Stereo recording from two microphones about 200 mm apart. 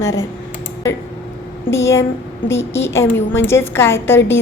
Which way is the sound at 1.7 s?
15° left (ahead or behind).